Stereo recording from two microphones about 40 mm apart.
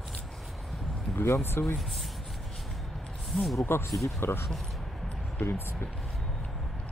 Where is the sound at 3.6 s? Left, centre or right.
Left.